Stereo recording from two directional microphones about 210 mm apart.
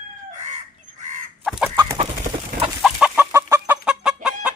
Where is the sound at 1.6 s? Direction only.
10° right (ahead or behind).